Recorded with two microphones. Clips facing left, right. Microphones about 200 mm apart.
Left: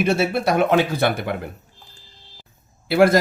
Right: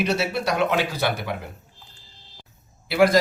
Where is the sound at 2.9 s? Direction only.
55° left (ahead or behind).